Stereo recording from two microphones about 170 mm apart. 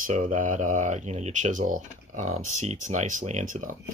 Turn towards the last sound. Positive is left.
turn(degrees=-45)  # may be behind; listen again after turning